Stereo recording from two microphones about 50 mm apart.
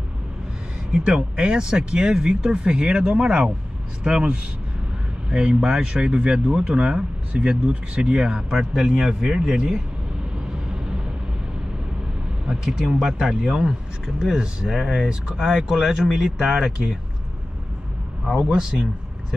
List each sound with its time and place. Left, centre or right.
0.9 s speech: centre
12.6 s speech: centre
18.2 s speech: centre